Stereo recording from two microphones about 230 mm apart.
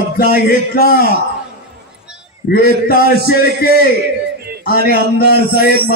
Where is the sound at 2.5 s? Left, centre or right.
Left.